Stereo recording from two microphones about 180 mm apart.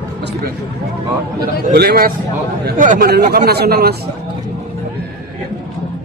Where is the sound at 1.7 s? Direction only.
60° right (ahead or behind).